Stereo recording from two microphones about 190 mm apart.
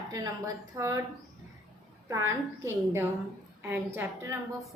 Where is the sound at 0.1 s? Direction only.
20° right (ahead or behind).